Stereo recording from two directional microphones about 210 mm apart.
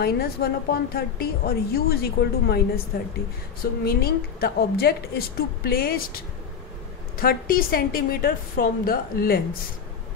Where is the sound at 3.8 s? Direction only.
45° left (ahead or behind).